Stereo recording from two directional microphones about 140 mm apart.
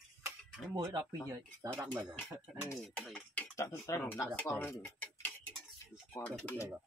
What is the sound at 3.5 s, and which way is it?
Speech, 20° left (ahead or behind).